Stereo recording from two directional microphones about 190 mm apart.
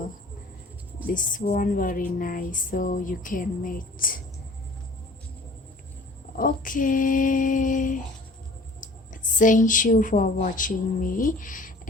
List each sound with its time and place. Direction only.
1.0 s a woman's voice: 45° left (ahead or behind)
6.3 s a woman's voice: 45° left (ahead or behind)